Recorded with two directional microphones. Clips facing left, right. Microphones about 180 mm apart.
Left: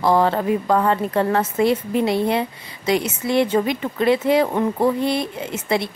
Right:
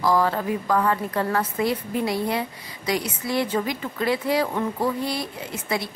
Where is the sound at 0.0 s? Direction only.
25° left (ahead or behind).